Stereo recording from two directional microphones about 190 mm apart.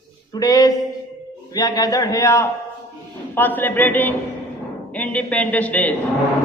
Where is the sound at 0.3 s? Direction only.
20° left (ahead or behind).